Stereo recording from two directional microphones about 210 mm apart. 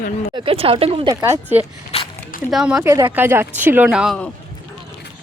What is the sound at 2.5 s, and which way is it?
Speech, centre (ahead or behind).